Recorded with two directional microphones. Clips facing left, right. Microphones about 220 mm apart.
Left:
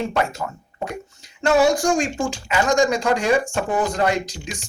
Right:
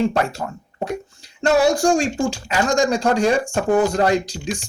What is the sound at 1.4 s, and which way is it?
Speech, 30° right (ahead or behind).